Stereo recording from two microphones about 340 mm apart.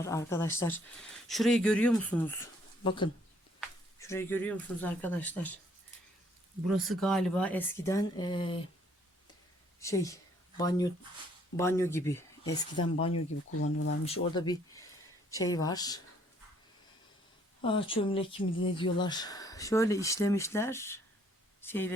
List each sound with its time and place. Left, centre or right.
0.0 s speech: centre
6.7 s speech: centre
9.8 s speech: centre
13.6 s speech: left
14.1 s speech: centre
17.6 s speech: centre